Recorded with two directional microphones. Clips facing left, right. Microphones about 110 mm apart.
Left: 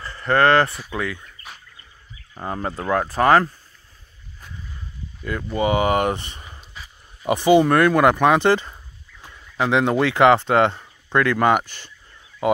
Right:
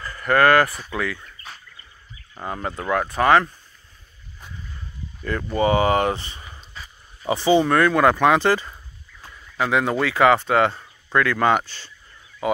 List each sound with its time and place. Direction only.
0.0 s speech: 25° left (ahead or behind)
1.2 s bird: 10° left (ahead or behind)
2.4 s speech: 30° left (ahead or behind)
5.5 s speech: 15° left (ahead or behind)